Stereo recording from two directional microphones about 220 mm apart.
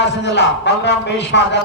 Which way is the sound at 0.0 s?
50° left (ahead or behind).